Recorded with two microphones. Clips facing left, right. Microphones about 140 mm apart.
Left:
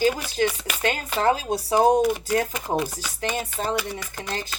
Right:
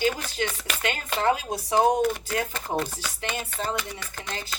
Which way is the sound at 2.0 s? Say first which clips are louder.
Left 4 dB; 15° left (ahead or behind).